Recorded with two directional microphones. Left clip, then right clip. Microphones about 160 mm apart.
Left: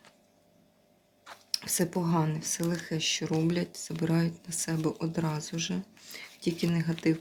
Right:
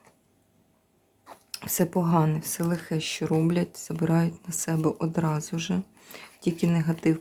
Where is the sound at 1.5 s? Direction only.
35° right (ahead or behind).